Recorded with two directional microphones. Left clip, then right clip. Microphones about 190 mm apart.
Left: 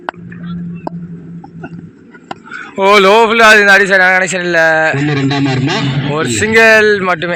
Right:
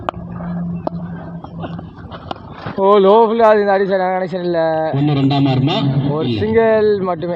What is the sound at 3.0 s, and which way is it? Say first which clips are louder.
Speech: left 2 dB; 15° left (ahead or behind).